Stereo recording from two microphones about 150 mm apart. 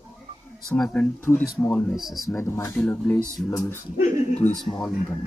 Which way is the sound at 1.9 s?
Centre (ahead or behind).